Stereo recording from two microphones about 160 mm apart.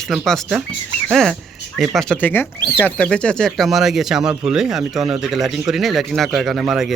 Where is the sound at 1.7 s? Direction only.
Centre (ahead or behind).